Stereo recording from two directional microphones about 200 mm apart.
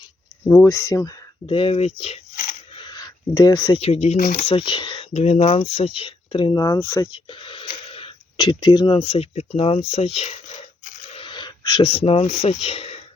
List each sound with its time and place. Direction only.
0.4 s speech: 15° left (ahead or behind)
1.5 s speech: 30° left (ahead or behind)
2.7 s a sound: 20° left (ahead or behind)
3.8 s speech: 30° left (ahead or behind); by 7.1 s 10° left (ahead or behind)
7.1 s speech: 25° left (ahead or behind)